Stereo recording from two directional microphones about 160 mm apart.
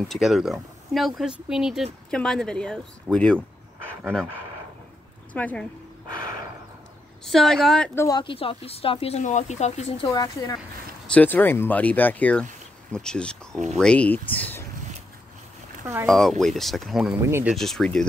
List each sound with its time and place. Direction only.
0.1 s speech: centre (ahead or behind)
5.3 s speech: 10° left (ahead or behind)
7.2 s speech: centre (ahead or behind)
7.9 s speech: 15° left (ahead or behind)
8.2 s speech: 35° left (ahead or behind)
10.0 s speech: 25° left (ahead or behind)
11.1 s speech: 10° left (ahead or behind)
15.8 s speech: 15° right (ahead or behind)
16.1 s speech: centre (ahead or behind)
17.2 s speech: 15° right (ahead or behind)
17.5 s speech: centre (ahead or behind)